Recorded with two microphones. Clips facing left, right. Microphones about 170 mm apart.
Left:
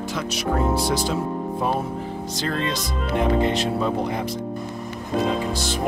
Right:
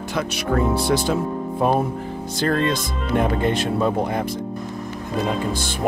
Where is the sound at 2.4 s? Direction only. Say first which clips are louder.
Right 6 dB; 50° right (ahead or behind).